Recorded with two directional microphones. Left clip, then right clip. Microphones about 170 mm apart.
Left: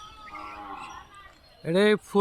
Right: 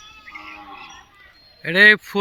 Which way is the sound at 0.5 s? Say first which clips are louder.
Right 1 dB; 50° left (ahead or behind).